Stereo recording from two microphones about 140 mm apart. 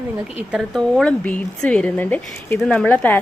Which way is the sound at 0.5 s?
Centre (ahead or behind).